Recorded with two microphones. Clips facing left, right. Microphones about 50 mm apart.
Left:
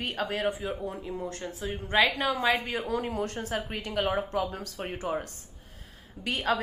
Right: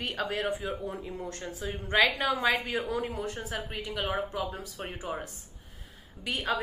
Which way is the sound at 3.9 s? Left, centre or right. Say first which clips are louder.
Left 4 dB; centre.